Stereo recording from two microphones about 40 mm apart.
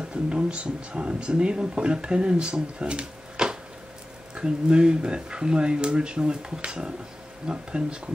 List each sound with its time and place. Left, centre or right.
0.1 s speech: right